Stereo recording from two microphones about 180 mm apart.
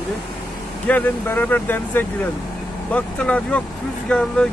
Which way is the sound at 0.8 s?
10° left (ahead or behind).